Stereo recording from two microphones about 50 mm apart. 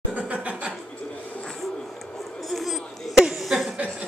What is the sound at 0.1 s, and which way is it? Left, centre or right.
Laughter, right.